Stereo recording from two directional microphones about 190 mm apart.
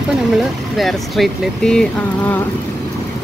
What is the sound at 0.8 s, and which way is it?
Speech, centre (ahead or behind).